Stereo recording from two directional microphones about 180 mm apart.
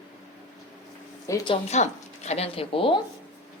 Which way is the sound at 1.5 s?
40° left (ahead or behind).